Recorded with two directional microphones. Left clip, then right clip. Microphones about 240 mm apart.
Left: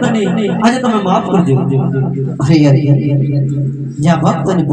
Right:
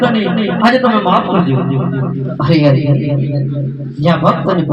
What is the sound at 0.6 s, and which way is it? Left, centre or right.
Speech, left.